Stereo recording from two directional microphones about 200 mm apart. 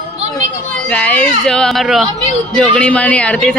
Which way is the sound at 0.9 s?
5° left (ahead or behind).